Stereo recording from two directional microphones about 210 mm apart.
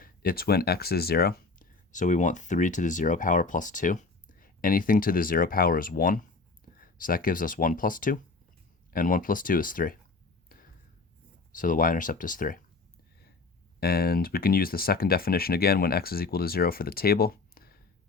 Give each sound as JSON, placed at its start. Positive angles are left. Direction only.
{"t": 0.0, "sound": "speech", "side_deg": 45}
{"t": 11.5, "sound": "speech", "side_deg": 40}
{"t": 13.7, "sound": "speech", "side_deg": 45}